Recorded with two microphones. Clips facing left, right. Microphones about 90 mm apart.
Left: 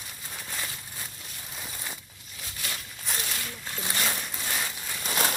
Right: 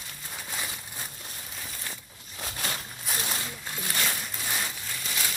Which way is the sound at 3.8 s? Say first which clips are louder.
Left 1 dB; 15° left (ahead or behind).